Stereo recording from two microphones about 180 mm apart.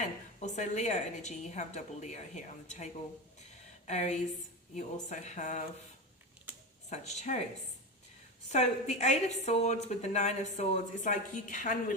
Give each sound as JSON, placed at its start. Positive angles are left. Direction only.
{"t": 0.0, "sound": "a woman's voice", "side_deg": 40}
{"t": 6.9, "sound": "a woman's voice", "side_deg": 40}
{"t": 8.4, "sound": "a woman's voice", "side_deg": 40}